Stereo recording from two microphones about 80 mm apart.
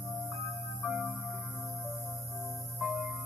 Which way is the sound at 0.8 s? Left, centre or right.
Centre.